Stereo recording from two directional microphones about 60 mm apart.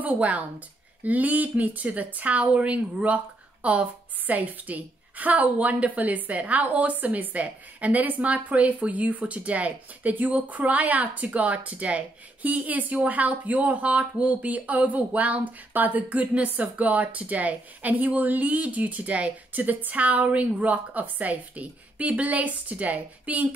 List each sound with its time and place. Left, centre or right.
0.0 s a woman's voice: right